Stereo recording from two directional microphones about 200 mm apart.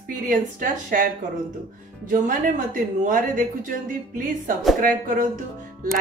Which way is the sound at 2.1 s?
40° right (ahead or behind).